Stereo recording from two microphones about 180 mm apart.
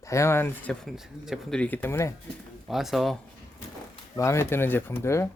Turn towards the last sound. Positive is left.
turn(degrees=15)  # may be behind; listen again after turning